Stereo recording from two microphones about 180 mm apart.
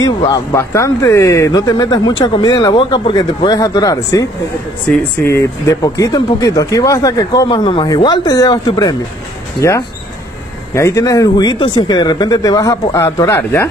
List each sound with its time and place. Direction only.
0.3 s speech: 15° left (ahead or behind)